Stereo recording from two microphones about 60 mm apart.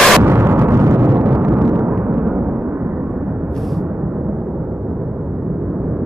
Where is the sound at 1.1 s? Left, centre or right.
Right.